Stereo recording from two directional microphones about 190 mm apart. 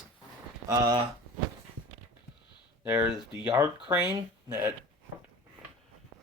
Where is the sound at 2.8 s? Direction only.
5° right (ahead or behind).